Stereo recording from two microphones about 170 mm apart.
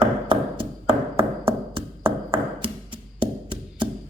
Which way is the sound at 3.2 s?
30° right (ahead or behind).